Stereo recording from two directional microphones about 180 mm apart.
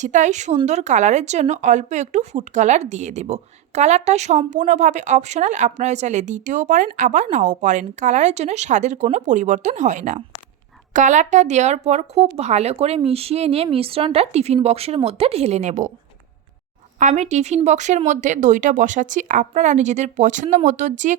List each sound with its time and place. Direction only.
0.0 s speech: 40° right (ahead or behind)
17.0 s speech: 40° right (ahead or behind)